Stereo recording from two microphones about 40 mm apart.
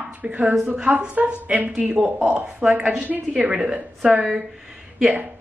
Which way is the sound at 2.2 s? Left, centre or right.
Right.